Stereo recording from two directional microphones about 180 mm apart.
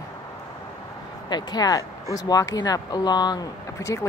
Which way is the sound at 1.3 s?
20° left (ahead or behind).